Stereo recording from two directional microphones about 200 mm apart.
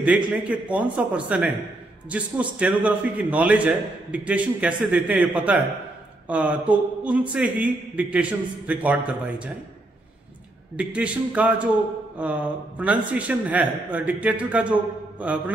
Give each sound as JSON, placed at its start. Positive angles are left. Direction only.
{"t": 0.4, "sound": "a man's voice", "side_deg": -5}
{"t": 7.4, "sound": "a man's voice", "side_deg": -45}
{"t": 7.9, "sound": "a man's voice", "side_deg": -5}
{"t": 10.8, "sound": "a man's voice", "side_deg": -5}